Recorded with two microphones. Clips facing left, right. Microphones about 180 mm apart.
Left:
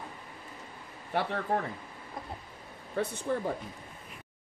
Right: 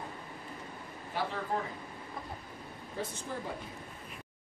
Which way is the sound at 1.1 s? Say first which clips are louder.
Left 4 dB; 60° left (ahead or behind).